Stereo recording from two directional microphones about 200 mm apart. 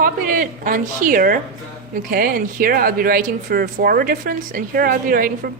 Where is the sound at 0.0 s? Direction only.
45° right (ahead or behind).